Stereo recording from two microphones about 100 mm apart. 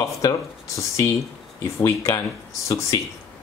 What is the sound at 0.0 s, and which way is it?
Speech, 35° left (ahead or behind).